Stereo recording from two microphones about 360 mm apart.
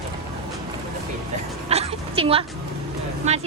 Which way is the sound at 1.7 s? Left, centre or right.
Centre.